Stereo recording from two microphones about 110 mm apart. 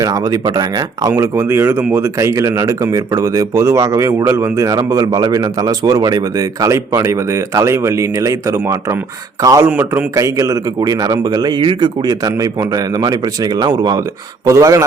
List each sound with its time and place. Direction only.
0.0 s a man's voice: 35° right (ahead or behind)
1.1 s a man's voice: 25° right (ahead or behind)
9.6 s a man's voice: 15° right (ahead or behind)
10.2 s a man's voice: 30° right (ahead or behind)